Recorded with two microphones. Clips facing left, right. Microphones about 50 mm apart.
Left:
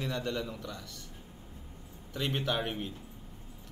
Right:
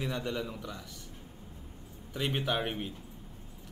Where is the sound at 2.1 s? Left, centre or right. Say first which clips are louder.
Right 1 dB; centre.